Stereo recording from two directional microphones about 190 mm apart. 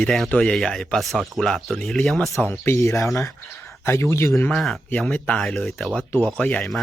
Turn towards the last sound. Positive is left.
turn(degrees=0)  # may be behind; listen again after turning